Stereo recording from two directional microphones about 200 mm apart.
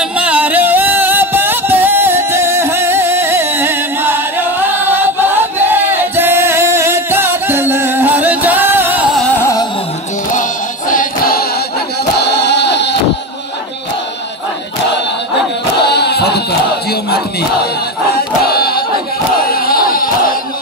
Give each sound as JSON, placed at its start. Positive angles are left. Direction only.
{"t": 0.2, "sound": "music", "side_deg": -5}
{"t": 9.4, "sound": "carnatic music", "side_deg": 15}
{"t": 10.9, "sound": "choir", "side_deg": 45}
{"t": 12.2, "sound": "singing", "side_deg": 55}
{"t": 15.8, "sound": "a sound", "side_deg": 55}
{"t": 18.4, "sound": "battle cry", "side_deg": 50}
{"t": 19.5, "sound": "a sound", "side_deg": 45}